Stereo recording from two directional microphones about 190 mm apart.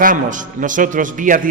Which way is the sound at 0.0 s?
45° right (ahead or behind).